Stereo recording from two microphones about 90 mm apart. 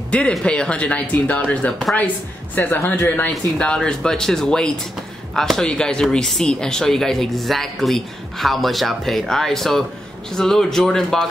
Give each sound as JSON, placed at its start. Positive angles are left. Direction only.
{"t": 0.3, "sound": "speech", "side_deg": 10}
{"t": 3.5, "sound": "speech", "side_deg": 10}